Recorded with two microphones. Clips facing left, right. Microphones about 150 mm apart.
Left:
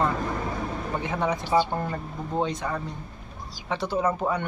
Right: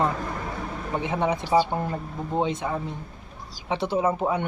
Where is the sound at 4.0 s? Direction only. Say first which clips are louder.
Even; 10° right (ahead or behind).